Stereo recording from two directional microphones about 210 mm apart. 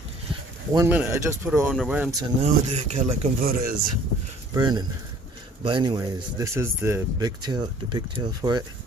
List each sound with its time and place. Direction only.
0.7 s speech: 10° right (ahead or behind)
2.4 s speech: 30° right (ahead or behind)
4.5 s speech: 20° right (ahead or behind)